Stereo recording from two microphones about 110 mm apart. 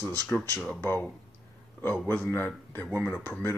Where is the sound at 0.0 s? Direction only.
10° left (ahead or behind).